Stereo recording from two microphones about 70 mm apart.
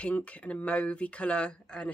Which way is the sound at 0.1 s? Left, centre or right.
Centre.